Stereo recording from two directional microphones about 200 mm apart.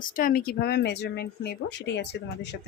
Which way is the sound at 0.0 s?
45° left (ahead or behind).